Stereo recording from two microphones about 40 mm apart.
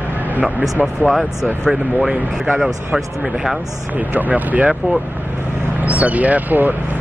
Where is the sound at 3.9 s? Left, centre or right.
Right.